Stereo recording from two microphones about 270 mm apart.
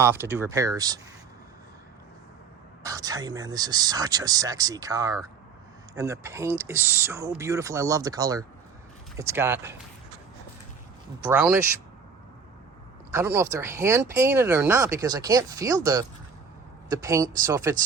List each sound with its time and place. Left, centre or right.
0.0 s speech: centre
2.8 s speech: centre
11.3 s speech: centre
13.1 s speech: centre